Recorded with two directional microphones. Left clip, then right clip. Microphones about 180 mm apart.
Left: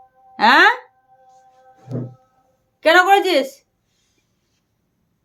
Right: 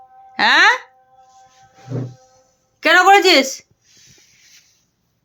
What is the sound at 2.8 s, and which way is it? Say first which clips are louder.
Speech: right 2 dB; 35° right (ahead or behind).